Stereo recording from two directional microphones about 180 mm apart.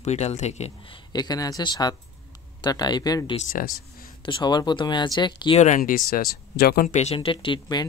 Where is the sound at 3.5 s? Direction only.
50° left (ahead or behind).